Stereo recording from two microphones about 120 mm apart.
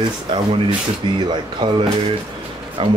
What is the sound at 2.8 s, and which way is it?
Speech, 45° right (ahead or behind).